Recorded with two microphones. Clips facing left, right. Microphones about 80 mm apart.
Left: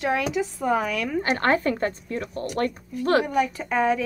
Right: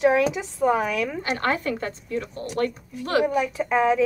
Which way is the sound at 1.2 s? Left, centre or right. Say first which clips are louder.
Left 5 dB; left.